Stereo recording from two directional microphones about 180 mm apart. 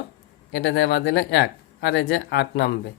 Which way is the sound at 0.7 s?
70° left (ahead or behind).